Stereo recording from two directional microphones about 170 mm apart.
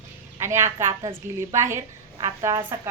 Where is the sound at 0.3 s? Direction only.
15° right (ahead or behind).